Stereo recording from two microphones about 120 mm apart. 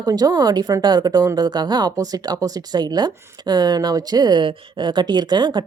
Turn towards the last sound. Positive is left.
turn(degrees=-40)  # may be behind; listen again after turning